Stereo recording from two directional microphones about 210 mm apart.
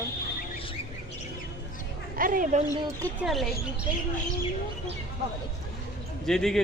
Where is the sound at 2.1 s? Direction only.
40° right (ahead or behind).